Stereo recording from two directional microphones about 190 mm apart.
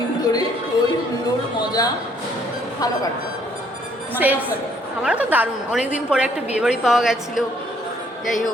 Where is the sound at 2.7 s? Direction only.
20° left (ahead or behind).